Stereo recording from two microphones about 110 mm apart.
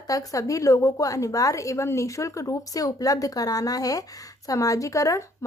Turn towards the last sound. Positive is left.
turn(degrees=30)  # may be behind; listen again after turning